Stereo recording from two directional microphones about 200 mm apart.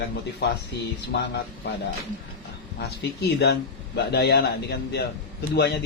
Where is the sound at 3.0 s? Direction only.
60° left (ahead or behind).